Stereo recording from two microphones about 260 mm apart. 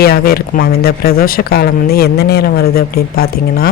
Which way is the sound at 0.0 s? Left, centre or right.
Left.